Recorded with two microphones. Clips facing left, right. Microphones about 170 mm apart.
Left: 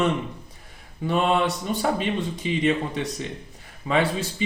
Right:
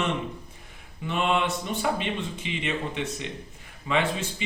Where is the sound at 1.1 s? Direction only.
40° left (ahead or behind).